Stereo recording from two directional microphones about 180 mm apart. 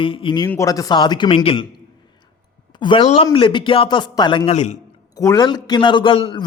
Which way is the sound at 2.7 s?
25° left (ahead or behind).